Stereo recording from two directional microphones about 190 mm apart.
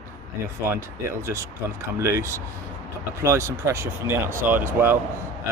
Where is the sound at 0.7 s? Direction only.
15° right (ahead or behind).